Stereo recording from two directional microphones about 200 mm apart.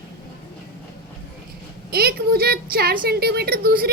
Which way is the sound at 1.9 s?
50° right (ahead or behind).